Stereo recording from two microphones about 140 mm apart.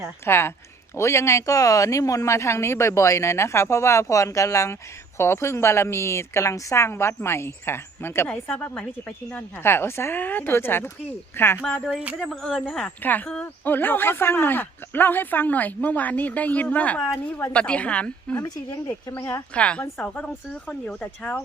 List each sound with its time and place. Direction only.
0.3 s speech: 15° left (ahead or behind)
11.9 s speech: centre (ahead or behind)
18.4 s speech: 25° left (ahead or behind)